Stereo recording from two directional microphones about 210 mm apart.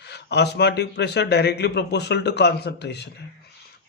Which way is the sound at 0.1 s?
55° left (ahead or behind).